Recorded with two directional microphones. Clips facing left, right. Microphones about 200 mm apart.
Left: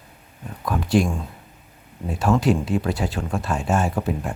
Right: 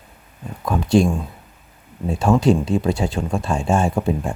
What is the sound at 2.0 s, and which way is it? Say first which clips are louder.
Speech: right 3 dB; 25° right (ahead or behind).